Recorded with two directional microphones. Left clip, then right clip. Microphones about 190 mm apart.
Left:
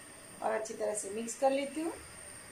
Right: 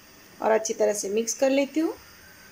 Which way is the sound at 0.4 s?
55° right (ahead or behind).